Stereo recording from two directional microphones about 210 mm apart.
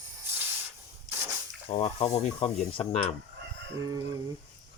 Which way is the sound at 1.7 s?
30° left (ahead or behind).